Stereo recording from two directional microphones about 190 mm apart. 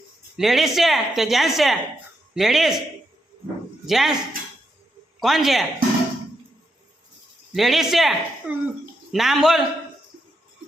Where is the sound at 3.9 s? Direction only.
Centre (ahead or behind).